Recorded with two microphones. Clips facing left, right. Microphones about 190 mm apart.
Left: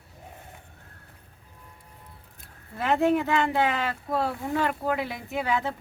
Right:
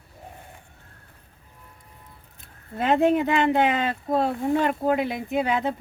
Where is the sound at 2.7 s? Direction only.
20° right (ahead or behind).